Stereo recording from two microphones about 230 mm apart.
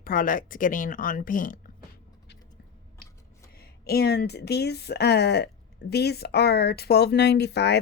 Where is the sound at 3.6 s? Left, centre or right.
Left.